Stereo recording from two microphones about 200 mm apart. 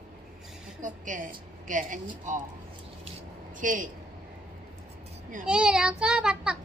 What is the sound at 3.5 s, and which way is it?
Speech, 40° right (ahead or behind).